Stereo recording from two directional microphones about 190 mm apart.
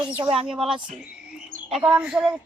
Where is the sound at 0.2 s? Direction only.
30° right (ahead or behind).